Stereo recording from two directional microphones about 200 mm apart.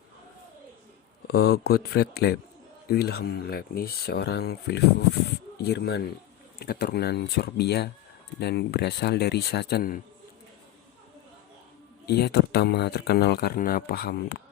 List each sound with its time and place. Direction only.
1.3 s speech: 50° left (ahead or behind)
12.0 s speech: 55° left (ahead or behind)